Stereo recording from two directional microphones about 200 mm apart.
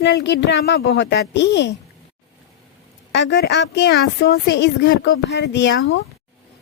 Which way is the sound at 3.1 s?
60° left (ahead or behind).